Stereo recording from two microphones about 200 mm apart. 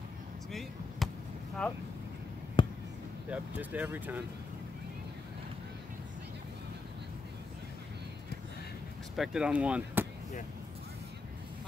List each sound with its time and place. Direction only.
0.5 s basketball bounce: centre (ahead or behind)
2.6 s a sound: 25° left (ahead or behind)
3.3 s speech: 10° right (ahead or behind)
9.1 s speech: centre (ahead or behind)